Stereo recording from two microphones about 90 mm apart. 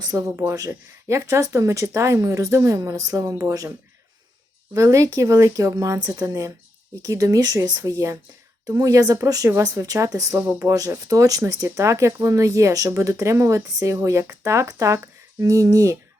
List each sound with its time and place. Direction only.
0.1 s speech: 35° right (ahead or behind)